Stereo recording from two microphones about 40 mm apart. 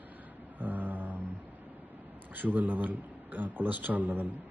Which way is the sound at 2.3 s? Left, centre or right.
Right.